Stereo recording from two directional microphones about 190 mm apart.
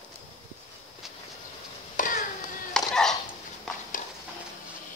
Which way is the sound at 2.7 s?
Centre (ahead or behind).